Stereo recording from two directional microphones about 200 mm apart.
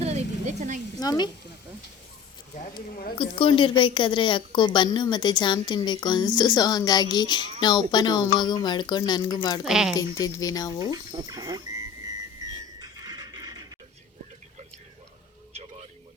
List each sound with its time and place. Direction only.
0.0 s a sound: 35° right (ahead or behind)
0.9 s speech: 20° left (ahead or behind)
3.2 s a woman's voice: 25° left (ahead or behind)
9.6 s speech: 5° right (ahead or behind)
9.9 s speech: 20° left (ahead or behind)
10.9 s a sound: 20° right (ahead or behind)
12.8 s neigh: 20° right (ahead or behind)